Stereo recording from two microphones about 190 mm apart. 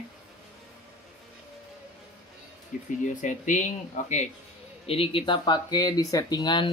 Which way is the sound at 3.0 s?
40° left (ahead or behind).